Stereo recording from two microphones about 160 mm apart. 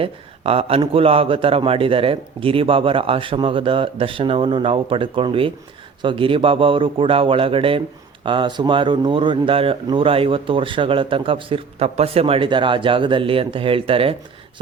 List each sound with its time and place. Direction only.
0.0 s speech: 35° right (ahead or behind)